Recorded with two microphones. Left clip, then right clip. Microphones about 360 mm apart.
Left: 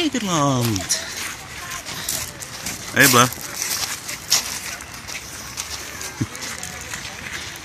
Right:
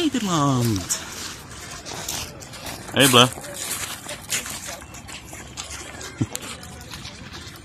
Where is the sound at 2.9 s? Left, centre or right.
Centre.